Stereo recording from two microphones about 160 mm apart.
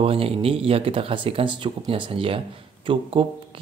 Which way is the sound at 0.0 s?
35° right (ahead or behind).